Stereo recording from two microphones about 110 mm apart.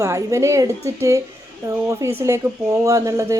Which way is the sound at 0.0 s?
30° right (ahead or behind).